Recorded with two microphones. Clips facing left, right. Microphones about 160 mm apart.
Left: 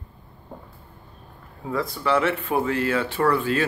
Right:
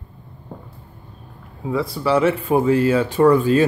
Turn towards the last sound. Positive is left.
turn(degrees=-15)  # may be behind; listen again after turning